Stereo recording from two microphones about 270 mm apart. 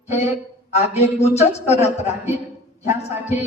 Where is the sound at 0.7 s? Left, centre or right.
Left.